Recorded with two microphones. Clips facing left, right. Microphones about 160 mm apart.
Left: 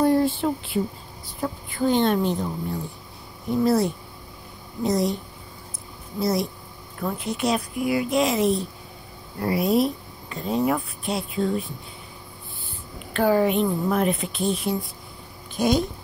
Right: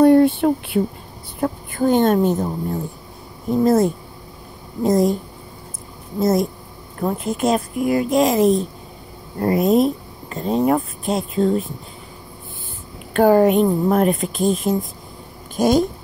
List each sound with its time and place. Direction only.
0.0 s speech: 60° right (ahead or behind)
1.4 s a woman's voice: 50° right (ahead or behind)
6.1 s a woman's voice: 45° right (ahead or behind)
13.1 s a woman's voice: 45° right (ahead or behind)